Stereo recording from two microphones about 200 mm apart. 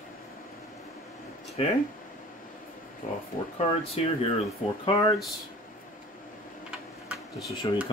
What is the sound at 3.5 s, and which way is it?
Speech, 30° left (ahead or behind).